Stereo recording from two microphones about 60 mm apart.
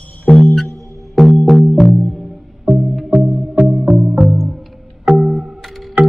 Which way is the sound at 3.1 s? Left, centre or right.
Centre.